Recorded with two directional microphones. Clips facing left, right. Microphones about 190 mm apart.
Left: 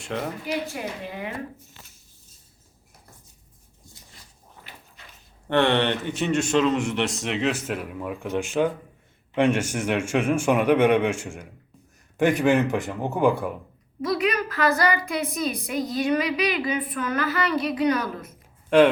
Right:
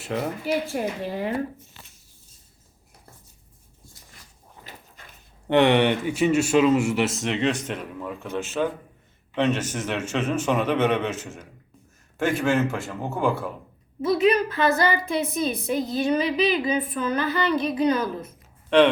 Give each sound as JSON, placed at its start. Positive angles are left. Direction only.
{"t": 0.0, "sound": "a man's voice", "side_deg": -5}
{"t": 1.0, "sound": "speech", "side_deg": -40}
{"t": 5.0, "sound": "dog", "side_deg": -50}
{"t": 5.5, "sound": "a man's voice", "side_deg": -15}
{"t": 14.0, "sound": "a woman's voice", "side_deg": -25}